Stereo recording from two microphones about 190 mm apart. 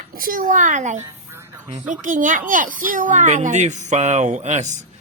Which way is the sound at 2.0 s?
40° right (ahead or behind).